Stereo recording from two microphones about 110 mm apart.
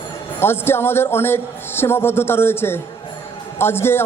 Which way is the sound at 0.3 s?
20° left (ahead or behind).